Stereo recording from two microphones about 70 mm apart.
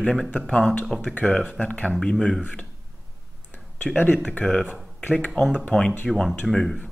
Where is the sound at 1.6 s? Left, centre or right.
Centre.